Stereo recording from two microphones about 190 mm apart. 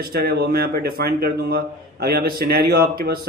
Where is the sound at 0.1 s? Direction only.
55° right (ahead or behind).